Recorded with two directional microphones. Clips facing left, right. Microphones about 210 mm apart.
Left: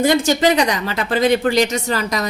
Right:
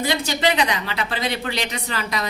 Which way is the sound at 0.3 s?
45° left (ahead or behind).